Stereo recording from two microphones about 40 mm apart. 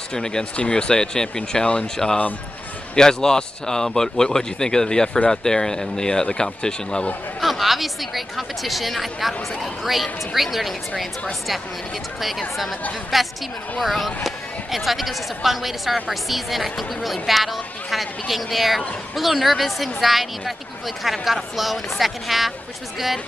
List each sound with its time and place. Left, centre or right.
0.1 s speech: centre
7.3 s speech: centre
12.2 s speech: centre